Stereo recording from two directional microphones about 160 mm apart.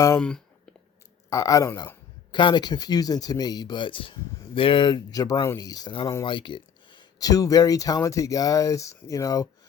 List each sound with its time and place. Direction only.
0.2 s speech: 5° left (ahead or behind)
1.3 s speech: 20° left (ahead or behind)